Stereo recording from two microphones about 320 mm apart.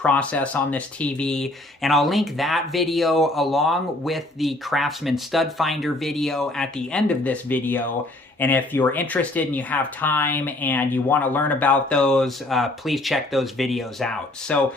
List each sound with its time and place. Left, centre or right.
0.0 s speech: centre